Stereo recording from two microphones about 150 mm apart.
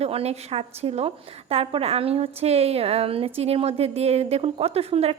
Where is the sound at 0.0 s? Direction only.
45° right (ahead or behind).